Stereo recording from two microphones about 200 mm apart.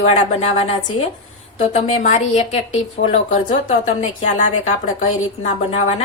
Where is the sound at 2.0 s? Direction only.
35° left (ahead or behind).